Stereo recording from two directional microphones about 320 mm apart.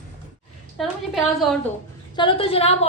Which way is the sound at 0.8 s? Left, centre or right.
Centre.